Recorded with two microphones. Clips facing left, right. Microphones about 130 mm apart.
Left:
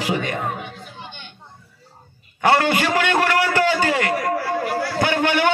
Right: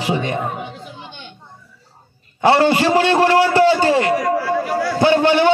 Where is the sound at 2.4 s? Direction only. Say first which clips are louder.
Right 4 dB; 25° right (ahead or behind).